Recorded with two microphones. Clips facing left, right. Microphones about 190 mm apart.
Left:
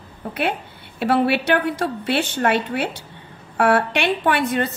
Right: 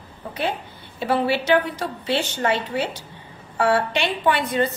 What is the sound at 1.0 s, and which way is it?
A woman's voice, 65° left (ahead or behind).